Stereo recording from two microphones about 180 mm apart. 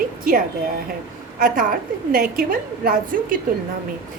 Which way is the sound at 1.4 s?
50° right (ahead or behind).